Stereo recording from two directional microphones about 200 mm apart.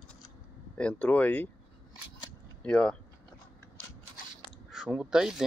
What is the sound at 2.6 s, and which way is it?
Speech, 5° left (ahead or behind).